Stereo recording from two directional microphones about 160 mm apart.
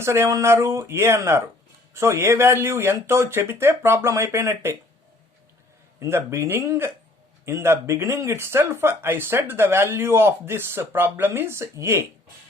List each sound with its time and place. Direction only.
0.0 s speech: 15° right (ahead or behind)
6.0 s speech: 15° right (ahead or behind)